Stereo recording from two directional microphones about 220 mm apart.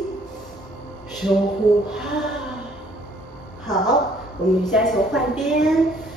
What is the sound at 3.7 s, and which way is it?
Speech, 15° left (ahead or behind).